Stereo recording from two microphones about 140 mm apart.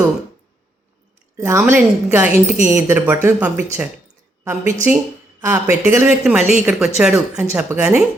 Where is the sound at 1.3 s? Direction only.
20° right (ahead or behind).